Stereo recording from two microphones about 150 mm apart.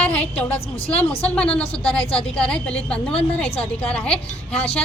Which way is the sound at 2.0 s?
40° left (ahead or behind).